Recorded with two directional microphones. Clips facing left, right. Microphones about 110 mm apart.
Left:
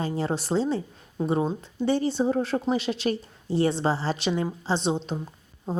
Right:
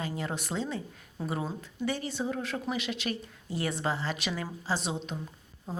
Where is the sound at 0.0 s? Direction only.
30° left (ahead or behind).